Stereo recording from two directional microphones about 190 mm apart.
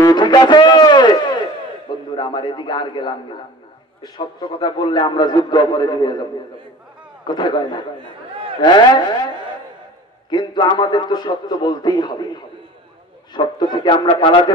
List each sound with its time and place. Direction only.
0.0 s a sound: 20° left (ahead or behind)
2.1 s a man's voice: 25° left (ahead or behind)
7.2 s a man's voice: 25° left (ahead or behind)
10.3 s a man's voice: 25° left (ahead or behind)